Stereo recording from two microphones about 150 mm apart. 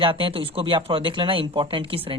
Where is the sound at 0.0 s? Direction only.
35° right (ahead or behind).